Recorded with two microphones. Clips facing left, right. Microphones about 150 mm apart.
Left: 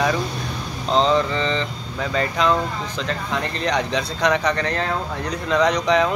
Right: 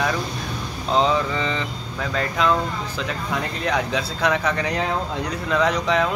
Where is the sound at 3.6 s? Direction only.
5° right (ahead or behind).